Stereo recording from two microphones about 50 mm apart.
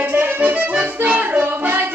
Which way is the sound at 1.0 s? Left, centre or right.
Right.